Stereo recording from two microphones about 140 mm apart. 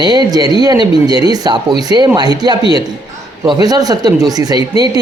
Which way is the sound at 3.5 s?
25° right (ahead or behind).